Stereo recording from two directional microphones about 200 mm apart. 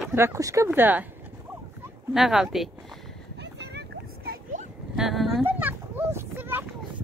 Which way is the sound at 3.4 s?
55° right (ahead or behind).